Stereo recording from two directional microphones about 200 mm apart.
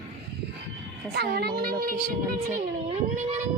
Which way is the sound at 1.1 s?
50° right (ahead or behind).